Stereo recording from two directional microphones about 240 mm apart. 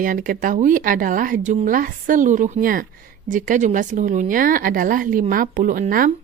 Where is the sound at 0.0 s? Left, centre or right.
Right.